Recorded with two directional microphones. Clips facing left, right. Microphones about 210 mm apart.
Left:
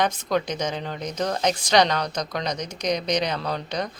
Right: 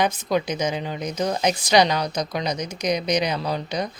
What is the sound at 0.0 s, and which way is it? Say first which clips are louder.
A woman's voice: right 1 dB; 10° right (ahead or behind).